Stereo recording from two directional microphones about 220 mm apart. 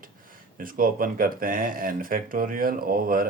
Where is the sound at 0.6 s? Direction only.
40° right (ahead or behind).